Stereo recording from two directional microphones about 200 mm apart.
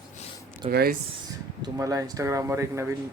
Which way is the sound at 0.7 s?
50° right (ahead or behind).